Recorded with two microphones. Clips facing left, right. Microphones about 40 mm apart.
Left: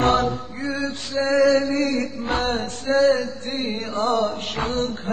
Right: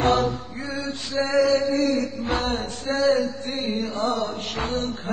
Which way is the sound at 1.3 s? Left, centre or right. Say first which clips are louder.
Left 2 dB; left.